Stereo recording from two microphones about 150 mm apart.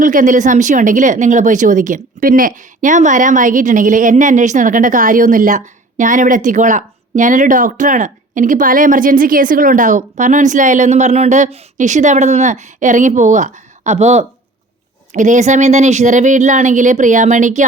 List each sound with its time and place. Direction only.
0.0 s speech: 60° right (ahead or behind)